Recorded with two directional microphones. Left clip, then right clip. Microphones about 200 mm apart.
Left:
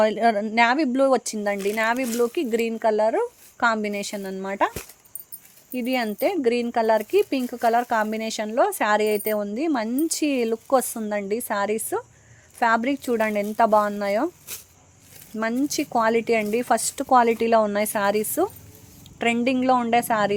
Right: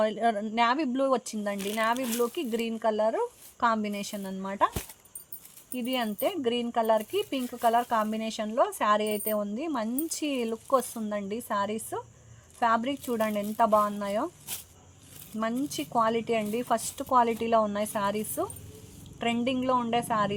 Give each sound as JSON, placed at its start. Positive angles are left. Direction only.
{"t": 0.0, "sound": "speech", "side_deg": 50}
{"t": 5.7, "sound": "speech", "side_deg": 50}
{"t": 15.4, "sound": "speech", "side_deg": 50}